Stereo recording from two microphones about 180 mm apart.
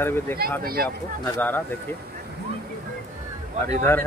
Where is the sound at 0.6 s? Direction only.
55° right (ahead or behind).